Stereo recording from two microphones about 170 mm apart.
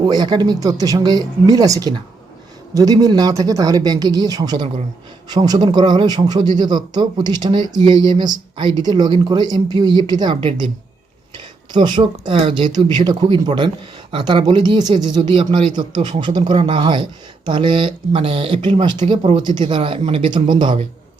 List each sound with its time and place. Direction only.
0.0 s speech: 25° right (ahead or behind)
11.7 s speech: 25° right (ahead or behind)